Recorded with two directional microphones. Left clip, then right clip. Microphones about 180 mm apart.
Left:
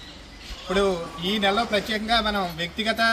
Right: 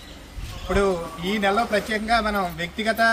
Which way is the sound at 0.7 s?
5° left (ahead or behind).